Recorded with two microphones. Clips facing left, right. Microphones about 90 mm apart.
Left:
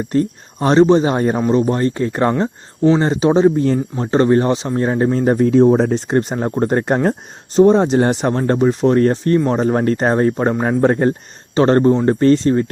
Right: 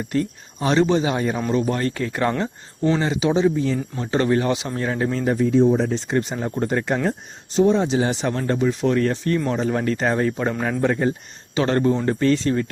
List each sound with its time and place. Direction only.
0.1 s speech: 35° left (ahead or behind)
1.5 s speech: 30° left (ahead or behind); by 3.8 s 50° left (ahead or behind)
3.9 s speech: 35° left (ahead or behind)
5.5 s speech: 60° left (ahead or behind); by 12.6 s 35° left (ahead or behind)